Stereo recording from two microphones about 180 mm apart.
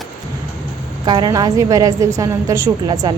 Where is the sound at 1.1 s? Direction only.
25° right (ahead or behind).